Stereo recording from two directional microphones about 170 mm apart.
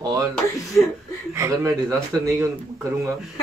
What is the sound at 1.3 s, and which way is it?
A man's voice, 15° right (ahead or behind).